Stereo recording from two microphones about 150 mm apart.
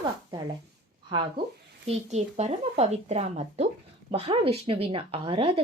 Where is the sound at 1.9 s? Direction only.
50° right (ahead or behind).